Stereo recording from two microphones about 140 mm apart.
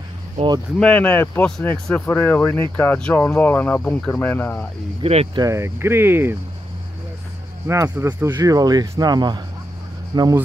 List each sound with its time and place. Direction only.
0.7 s speech: 10° left (ahead or behind)
5.0 s speech: 45° right (ahead or behind)
5.4 s speech: 20° right (ahead or behind)
7.6 s speech: 20° right (ahead or behind)
8.4 s speech: 25° right (ahead or behind)